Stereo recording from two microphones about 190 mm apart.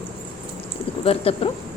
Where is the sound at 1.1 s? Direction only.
30° left (ahead or behind).